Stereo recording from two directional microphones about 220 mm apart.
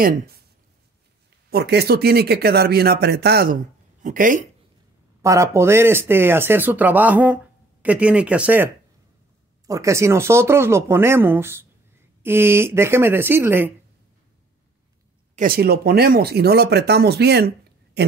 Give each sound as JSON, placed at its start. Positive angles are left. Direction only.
{"t": 1.5, "sound": "speech", "side_deg": -45}
{"t": 5.2, "sound": "speech", "side_deg": -15}
{"t": 9.7, "sound": "speech", "side_deg": -15}
{"t": 15.3, "sound": "speech", "side_deg": -40}